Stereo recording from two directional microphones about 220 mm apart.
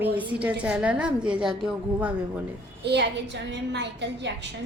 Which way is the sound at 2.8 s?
50° right (ahead or behind).